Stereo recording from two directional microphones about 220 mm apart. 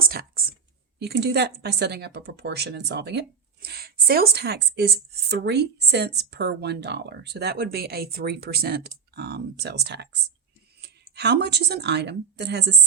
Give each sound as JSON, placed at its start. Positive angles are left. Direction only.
{"t": 0.0, "sound": "whispering", "side_deg": -45}
{"t": 0.9, "sound": "speech", "side_deg": -50}